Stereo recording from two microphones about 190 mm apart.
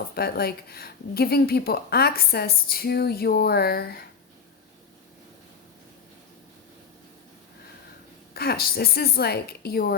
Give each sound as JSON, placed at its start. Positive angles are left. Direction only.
{"t": 0.2, "sound": "speech", "side_deg": 55}
{"t": 8.3, "sound": "speech", "side_deg": 55}